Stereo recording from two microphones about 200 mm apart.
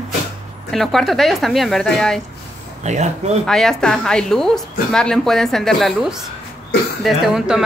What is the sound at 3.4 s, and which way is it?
A woman's voice, centre (ahead or behind).